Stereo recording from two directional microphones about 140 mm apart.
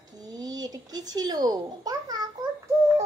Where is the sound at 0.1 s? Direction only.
30° right (ahead or behind).